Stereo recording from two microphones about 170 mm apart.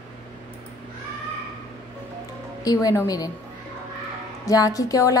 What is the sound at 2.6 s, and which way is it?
Speech, 20° left (ahead or behind).